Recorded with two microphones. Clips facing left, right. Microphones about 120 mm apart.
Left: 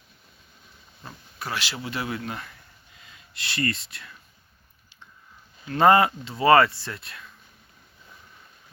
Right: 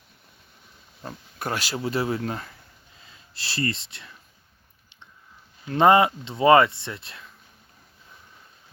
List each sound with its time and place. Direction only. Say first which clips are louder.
1.0 s speech: right 4 dB; 45° right (ahead or behind); by 4.1 s 25° right (ahead or behind)
5.6 s speech: right 1 dB; 20° right (ahead or behind)